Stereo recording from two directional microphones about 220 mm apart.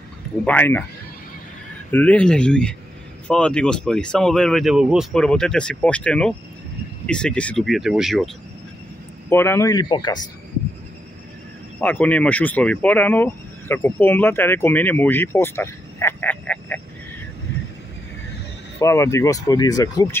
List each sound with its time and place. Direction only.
0.5 s speech: 10° left (ahead or behind)
1.9 s speech: 5° left (ahead or behind)
9.3 s speech: 10° left (ahead or behind)
11.8 s speech: 5° left (ahead or behind)
18.8 s speech: 15° left (ahead or behind)